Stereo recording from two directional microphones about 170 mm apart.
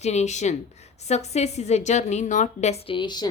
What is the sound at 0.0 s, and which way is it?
A woman's voice, 40° left (ahead or behind).